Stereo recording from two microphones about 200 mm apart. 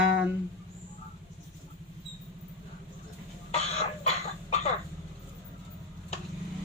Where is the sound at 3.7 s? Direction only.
35° left (ahead or behind).